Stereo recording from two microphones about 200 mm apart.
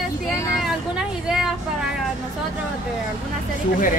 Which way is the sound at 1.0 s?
5° right (ahead or behind).